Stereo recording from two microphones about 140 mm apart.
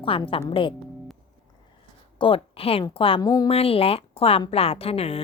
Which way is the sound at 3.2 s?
30° left (ahead or behind).